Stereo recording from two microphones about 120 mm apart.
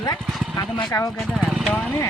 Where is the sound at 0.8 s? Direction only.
30° left (ahead or behind).